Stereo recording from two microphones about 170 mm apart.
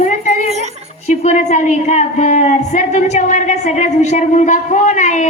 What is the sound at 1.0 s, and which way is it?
A woman's voice, 45° left (ahead or behind).